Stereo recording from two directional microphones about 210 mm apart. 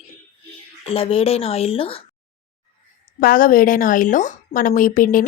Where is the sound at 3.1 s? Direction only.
40° left (ahead or behind).